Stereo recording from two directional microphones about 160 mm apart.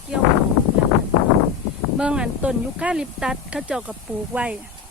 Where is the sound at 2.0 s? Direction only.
5° right (ahead or behind).